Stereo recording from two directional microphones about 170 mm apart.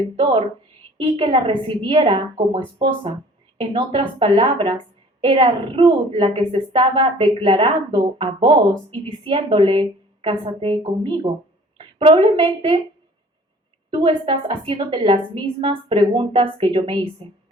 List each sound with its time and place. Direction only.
0.2 s a woman's voice: 30° right (ahead or behind)
13.9 s a woman's voice: 30° right (ahead or behind)